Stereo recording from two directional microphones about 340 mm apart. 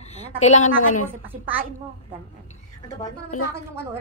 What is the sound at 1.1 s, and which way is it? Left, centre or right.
Speech, centre.